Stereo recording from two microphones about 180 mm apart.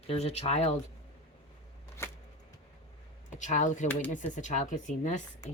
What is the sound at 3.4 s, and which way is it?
Speech, 45° left (ahead or behind).